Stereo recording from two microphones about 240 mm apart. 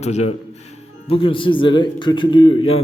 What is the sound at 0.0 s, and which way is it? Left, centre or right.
A man's voice, left.